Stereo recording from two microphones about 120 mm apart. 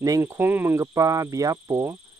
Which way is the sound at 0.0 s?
25° right (ahead or behind).